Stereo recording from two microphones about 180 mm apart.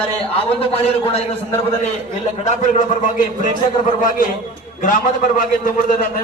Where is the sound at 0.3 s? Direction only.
30° left (ahead or behind).